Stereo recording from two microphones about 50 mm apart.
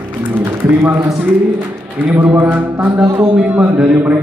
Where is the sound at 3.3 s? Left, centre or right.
Right.